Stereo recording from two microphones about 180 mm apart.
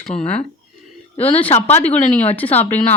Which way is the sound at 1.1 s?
30° left (ahead or behind).